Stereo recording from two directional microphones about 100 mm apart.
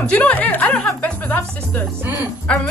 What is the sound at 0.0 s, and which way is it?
Speech, 15° left (ahead or behind).